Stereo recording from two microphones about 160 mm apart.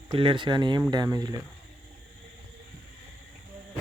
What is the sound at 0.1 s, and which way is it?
Speech, 30° right (ahead or behind).